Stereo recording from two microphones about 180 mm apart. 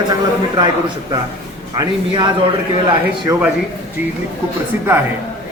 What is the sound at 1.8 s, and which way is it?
Speech, 25° right (ahead or behind).